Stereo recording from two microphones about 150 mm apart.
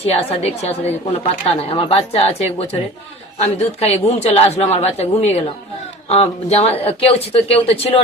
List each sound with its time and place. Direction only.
0.0 s a man's voice: 40° left (ahead or behind)